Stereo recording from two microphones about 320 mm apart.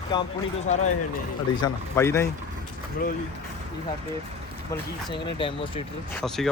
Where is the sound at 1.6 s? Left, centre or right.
Centre.